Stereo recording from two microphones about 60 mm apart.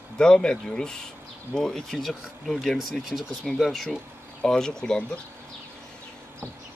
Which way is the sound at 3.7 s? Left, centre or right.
Centre.